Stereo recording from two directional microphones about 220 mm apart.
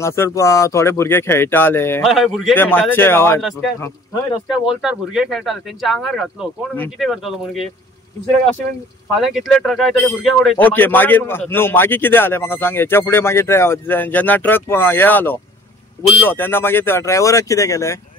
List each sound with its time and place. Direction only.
0.0 s speech: 10° left (ahead or behind)
2.0 s speech: centre (ahead or behind)
4.5 s speech: centre (ahead or behind)
9.2 s speech: centre (ahead or behind)